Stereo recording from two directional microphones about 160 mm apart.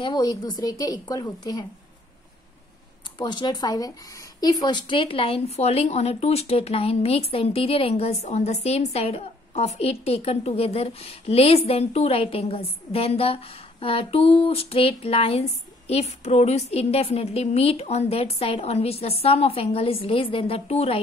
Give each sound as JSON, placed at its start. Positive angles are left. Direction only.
{"t": 0.0, "sound": "a woman's voice", "side_deg": 25}
{"t": 3.2, "sound": "a woman's voice", "side_deg": 30}